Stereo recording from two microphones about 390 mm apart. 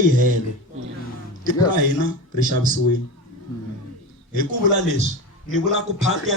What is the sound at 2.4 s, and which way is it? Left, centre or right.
Speech, centre.